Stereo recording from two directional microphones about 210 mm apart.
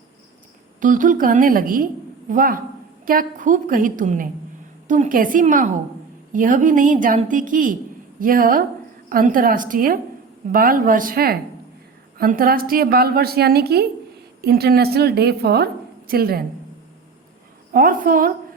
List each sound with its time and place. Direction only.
0.8 s a woman's voice: 40° right (ahead or behind)
17.7 s a woman's voice: 40° right (ahead or behind)